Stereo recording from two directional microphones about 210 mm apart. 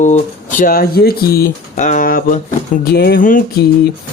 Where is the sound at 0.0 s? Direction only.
35° left (ahead or behind).